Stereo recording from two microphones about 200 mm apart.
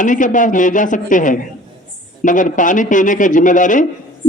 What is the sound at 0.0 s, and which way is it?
A man's voice, 40° left (ahead or behind).